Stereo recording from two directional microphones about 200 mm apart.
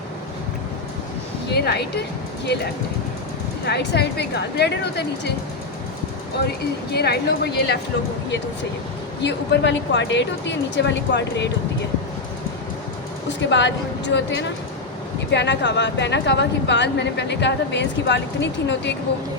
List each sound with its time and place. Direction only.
1.5 s a woman's voice: 55° left (ahead or behind)
3.7 s a woman's voice: 55° left (ahead or behind)
6.9 s a woman's voice: 55° left (ahead or behind)
9.2 s a woman's voice: 60° left (ahead or behind)
13.5 s a woman's voice: 60° left (ahead or behind)